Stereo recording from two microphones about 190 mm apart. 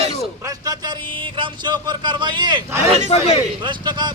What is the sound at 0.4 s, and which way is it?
Speech, 20° right (ahead or behind).